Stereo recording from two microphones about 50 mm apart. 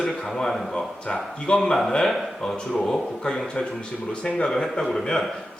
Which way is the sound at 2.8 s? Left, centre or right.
Centre.